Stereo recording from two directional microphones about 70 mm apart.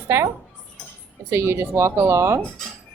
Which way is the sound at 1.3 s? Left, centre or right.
Right.